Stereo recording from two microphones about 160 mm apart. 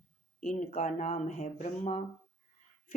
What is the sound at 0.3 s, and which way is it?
A woman's voice, 50° left (ahead or behind).